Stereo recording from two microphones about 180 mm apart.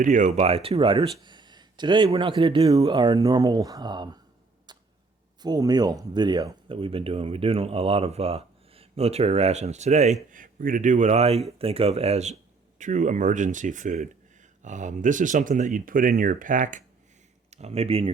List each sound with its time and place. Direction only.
0.0 s speech: 45° right (ahead or behind); by 4.2 s 25° right (ahead or behind)
5.4 s speech: 20° right (ahead or behind); by 10.2 s 40° right (ahead or behind)
10.3 s speech: 50° right (ahead or behind)
17.5 s speech: 35° right (ahead or behind)